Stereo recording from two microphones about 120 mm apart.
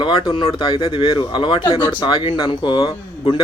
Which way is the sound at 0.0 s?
40° left (ahead or behind).